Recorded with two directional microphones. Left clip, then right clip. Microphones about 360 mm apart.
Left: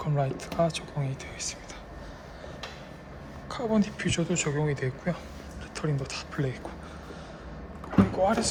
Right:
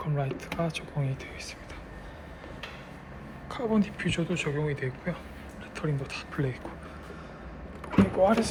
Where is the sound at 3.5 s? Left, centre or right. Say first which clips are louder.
Left 1 dB; centre.